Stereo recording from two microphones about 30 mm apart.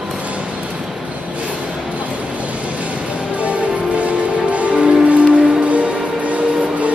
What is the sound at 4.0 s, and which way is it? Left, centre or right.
Music, right.